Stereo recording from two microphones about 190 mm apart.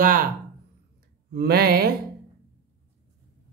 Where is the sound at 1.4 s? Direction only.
55° right (ahead or behind).